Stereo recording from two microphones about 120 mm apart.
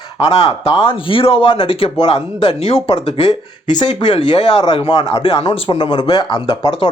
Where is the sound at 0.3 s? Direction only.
60° left (ahead or behind).